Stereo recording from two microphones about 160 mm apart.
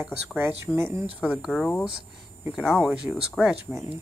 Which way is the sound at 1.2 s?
5° right (ahead or behind).